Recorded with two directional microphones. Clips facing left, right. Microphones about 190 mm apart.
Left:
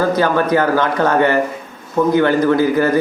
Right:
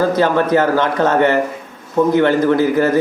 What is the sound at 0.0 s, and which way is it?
A man's voice, 25° right (ahead or behind).